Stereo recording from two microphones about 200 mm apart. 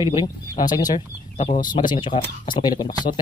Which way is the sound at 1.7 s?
20° left (ahead or behind).